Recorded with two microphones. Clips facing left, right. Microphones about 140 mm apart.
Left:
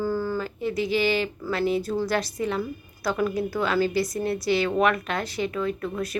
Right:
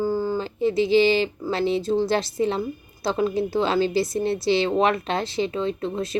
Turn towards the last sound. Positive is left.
turn(degrees=-25)  # may be behind; listen again after turning